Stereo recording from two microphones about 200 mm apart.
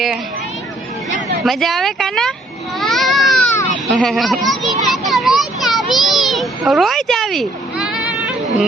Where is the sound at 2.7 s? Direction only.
Centre (ahead or behind).